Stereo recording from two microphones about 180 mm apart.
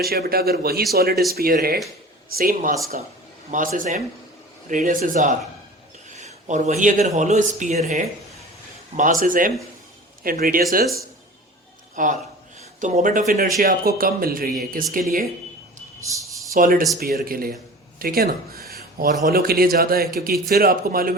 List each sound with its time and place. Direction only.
0.0 s a man's voice: 60° right (ahead or behind); by 7.8 s 40° right (ahead or behind)
9.0 s speech: 45° right (ahead or behind)
12.0 s speech: 45° right (ahead or behind)
16.0 s speech: 15° right (ahead or behind)
16.6 s speech: 50° right (ahead or behind)